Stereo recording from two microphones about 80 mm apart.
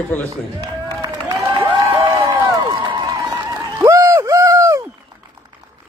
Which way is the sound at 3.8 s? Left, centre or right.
Right.